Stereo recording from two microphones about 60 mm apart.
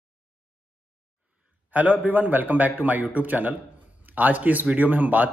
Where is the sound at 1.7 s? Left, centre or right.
Right.